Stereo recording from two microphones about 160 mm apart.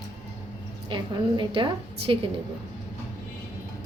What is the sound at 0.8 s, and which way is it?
A woman's voice, 30° right (ahead or behind).